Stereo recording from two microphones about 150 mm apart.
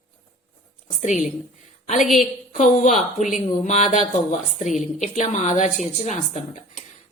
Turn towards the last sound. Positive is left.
turn(degrees=50)  # may be behind; listen again after turning